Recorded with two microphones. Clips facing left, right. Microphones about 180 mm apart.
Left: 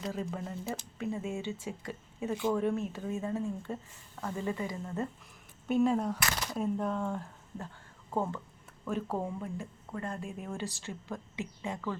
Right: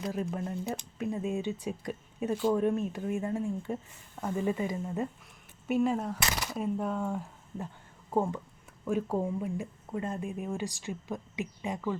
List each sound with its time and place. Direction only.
0.1 s speech: 15° right (ahead or behind)
0.4 s speech: centre (ahead or behind)
0.9 s speech: 15° right (ahead or behind)
5.6 s speech: 5° right (ahead or behind)
8.8 s speech: 15° right (ahead or behind)